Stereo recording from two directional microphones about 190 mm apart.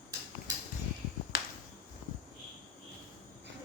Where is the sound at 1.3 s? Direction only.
55° left (ahead or behind).